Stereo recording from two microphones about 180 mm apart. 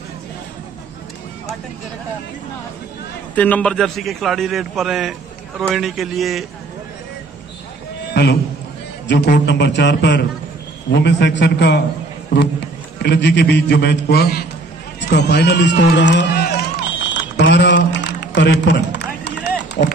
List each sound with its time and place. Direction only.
3.3 s a man's voice: 10° left (ahead or behind)
8.1 s a man's voice: 65° left (ahead or behind)
13.0 s a man's voice: 70° left (ahead or behind)
17.4 s a sound: 75° left (ahead or behind)